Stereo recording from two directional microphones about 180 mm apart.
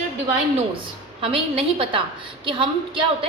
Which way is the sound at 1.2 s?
30° right (ahead or behind).